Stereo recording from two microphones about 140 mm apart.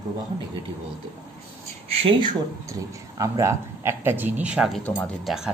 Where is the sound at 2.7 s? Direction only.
25° right (ahead or behind); by 4.8 s 5° right (ahead or behind).